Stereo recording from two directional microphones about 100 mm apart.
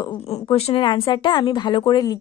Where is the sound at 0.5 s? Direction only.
90° left.